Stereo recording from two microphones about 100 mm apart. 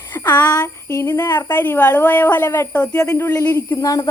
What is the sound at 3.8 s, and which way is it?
Speech, 35° left (ahead or behind).